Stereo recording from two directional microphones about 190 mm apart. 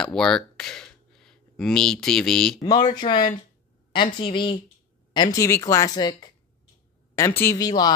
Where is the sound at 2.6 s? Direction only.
20° left (ahead or behind).